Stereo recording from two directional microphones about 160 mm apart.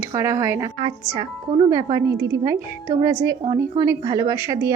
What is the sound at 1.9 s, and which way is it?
A woman's voice, 20° right (ahead or behind).